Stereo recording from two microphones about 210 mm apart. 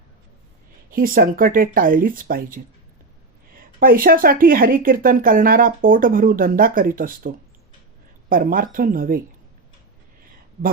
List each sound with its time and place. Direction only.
0.9 s speech: 45° right (ahead or behind)
3.8 s speech: 40° right (ahead or behind)